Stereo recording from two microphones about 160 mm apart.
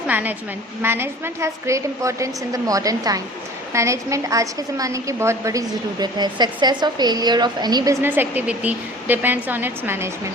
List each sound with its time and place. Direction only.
0.1 s a woman's voice: 10° right (ahead or behind); by 7.9 s 25° right (ahead or behind)
8.0 s a woman's voice: 10° right (ahead or behind)